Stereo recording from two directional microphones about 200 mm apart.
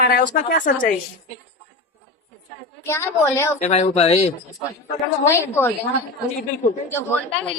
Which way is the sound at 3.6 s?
35° left (ahead or behind).